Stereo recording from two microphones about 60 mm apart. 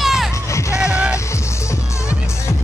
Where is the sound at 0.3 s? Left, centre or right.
Left.